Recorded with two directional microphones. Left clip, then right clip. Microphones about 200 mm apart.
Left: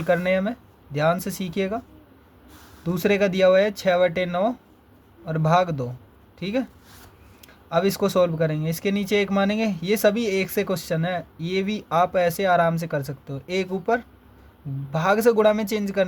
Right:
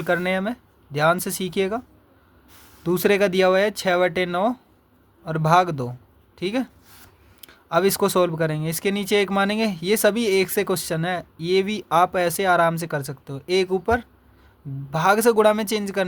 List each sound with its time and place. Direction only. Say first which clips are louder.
0.0 s speech: left 1 dB; 35° right (ahead or behind)
2.8 s speech: right 2 dB; 40° right (ahead or behind)